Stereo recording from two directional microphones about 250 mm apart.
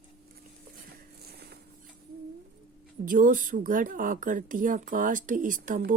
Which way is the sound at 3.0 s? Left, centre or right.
Right.